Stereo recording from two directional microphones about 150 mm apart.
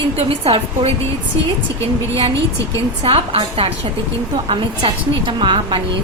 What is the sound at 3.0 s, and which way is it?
A woman's voice, 40° right (ahead or behind).